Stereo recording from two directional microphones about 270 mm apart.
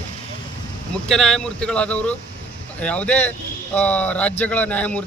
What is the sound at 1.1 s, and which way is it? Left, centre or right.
Speech, centre.